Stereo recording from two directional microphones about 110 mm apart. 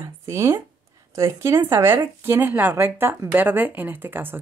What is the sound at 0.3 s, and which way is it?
Speech, 25° right (ahead or behind).